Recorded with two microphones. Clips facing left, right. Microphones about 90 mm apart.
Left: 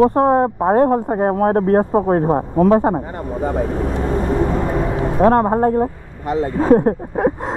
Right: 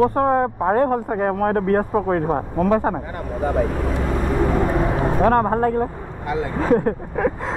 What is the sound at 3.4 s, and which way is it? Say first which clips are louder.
Vehicle: even; 35° left (ahead or behind).